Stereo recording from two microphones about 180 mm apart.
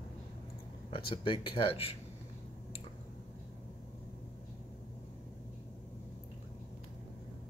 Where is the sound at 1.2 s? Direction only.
30° left (ahead or behind).